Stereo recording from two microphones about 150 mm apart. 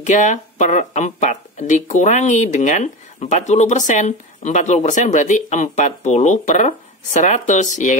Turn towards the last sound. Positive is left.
turn(degrees=55)  # may be behind; listen again after turning